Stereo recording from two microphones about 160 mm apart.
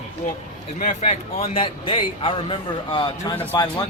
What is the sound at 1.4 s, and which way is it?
A man's voice, 35° left (ahead or behind).